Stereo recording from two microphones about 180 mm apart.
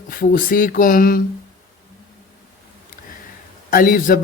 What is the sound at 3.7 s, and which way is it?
Mantra, 55° left (ahead or behind).